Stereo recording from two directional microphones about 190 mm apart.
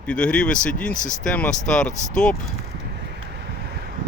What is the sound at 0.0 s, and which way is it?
Speech, 5° left (ahead or behind).